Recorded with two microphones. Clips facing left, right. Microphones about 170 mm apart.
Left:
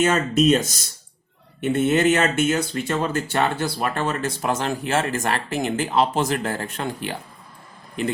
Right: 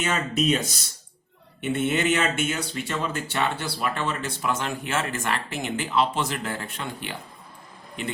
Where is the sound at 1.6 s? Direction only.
40° left (ahead or behind).